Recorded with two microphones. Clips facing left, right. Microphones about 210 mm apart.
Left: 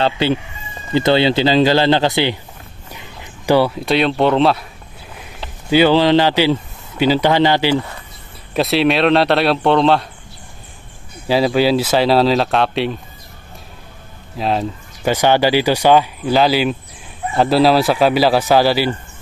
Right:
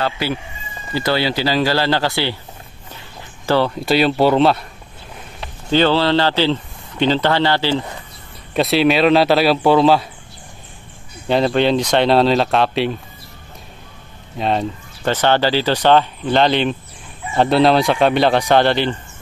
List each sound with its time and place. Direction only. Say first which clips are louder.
0.0 s speech: left 5 dB; 25° left (ahead or behind)
2.9 s a sound: left 2 dB; 15° left (ahead or behind)
3.8 s speech: even; centre (ahead or behind); by 7.7 s 15° left (ahead or behind)
8.5 s speech: even; centre (ahead or behind)
11.2 s speech: left 1 dB; 5° left (ahead or behind)
14.3 s speech: even; centre (ahead or behind)